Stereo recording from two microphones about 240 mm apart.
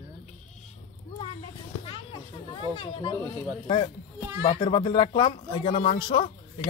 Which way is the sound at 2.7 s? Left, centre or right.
Left.